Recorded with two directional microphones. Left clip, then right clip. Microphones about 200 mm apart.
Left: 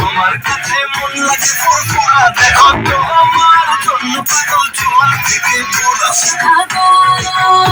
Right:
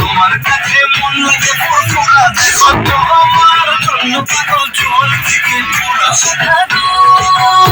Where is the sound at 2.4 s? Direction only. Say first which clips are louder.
Left 1 dB; 25° right (ahead or behind).